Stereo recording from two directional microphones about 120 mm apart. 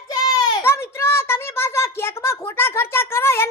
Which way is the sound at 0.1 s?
35° left (ahead or behind).